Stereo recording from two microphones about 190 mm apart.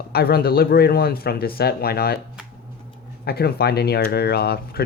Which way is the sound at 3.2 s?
55° left (ahead or behind).